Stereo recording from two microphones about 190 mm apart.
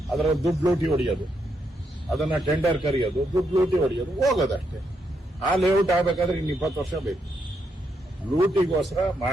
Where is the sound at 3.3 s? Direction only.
15° right (ahead or behind).